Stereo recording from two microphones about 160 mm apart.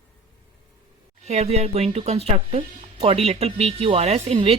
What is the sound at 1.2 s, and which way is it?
Speech, 45° right (ahead or behind).